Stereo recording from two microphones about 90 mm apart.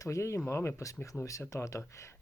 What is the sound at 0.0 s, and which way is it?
Speech, 35° left (ahead or behind).